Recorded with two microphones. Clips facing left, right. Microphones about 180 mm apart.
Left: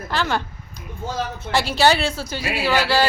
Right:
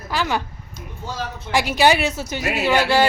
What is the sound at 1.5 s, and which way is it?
A woman's voice, 15° right (ahead or behind).